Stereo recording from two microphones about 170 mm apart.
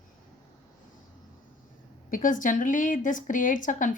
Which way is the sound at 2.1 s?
50° left (ahead or behind).